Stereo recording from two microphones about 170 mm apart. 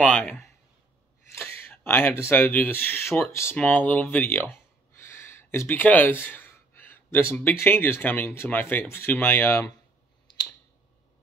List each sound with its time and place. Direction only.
0.0 s speech: 10° left (ahead or behind)